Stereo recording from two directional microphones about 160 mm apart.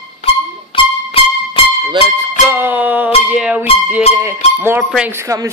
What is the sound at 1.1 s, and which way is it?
Music, 35° left (ahead or behind).